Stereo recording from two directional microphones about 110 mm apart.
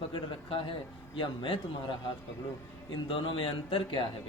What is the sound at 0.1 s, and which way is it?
Speech, 55° left (ahead or behind).